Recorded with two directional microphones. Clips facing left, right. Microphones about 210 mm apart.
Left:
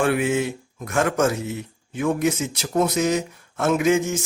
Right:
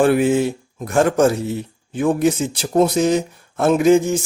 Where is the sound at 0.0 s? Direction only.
35° right (ahead or behind).